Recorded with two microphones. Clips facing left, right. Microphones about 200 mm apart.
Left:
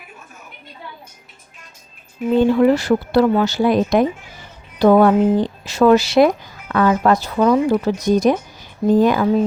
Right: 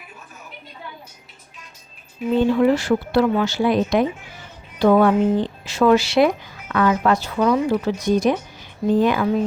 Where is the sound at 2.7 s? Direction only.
40° left (ahead or behind).